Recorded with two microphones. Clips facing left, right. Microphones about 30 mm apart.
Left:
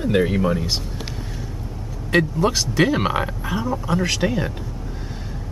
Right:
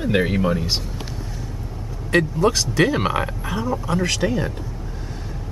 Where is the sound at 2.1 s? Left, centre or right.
Centre.